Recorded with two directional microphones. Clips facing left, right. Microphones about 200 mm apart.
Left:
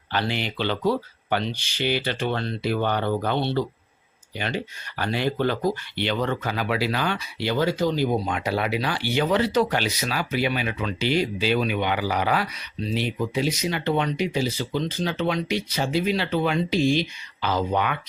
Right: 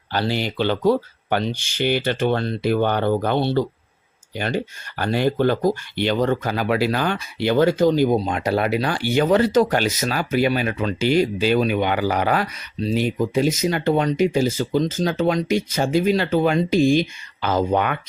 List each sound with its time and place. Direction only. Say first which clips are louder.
0.1 s speech: right 4 dB; 40° right (ahead or behind)